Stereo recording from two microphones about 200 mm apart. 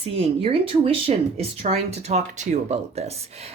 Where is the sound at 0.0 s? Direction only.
30° right (ahead or behind).